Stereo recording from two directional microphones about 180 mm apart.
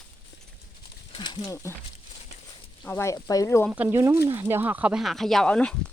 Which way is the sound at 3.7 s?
10° right (ahead or behind).